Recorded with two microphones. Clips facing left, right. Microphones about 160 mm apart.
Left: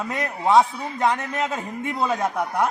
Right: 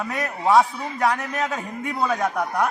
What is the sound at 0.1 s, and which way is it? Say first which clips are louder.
A man's voice: even; 20° left (ahead or behind).